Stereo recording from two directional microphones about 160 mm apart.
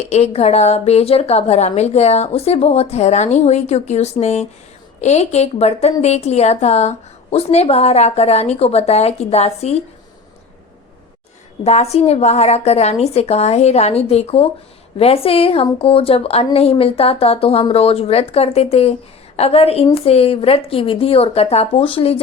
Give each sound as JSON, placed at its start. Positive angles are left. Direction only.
{"t": 0.0, "sound": "a woman's voice", "side_deg": 40}
{"t": 11.6, "sound": "a woman's voice", "side_deg": 40}